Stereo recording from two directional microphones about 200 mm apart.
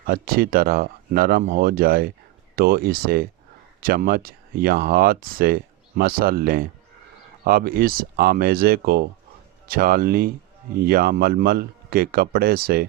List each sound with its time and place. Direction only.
0.0 s speech: 45° right (ahead or behind)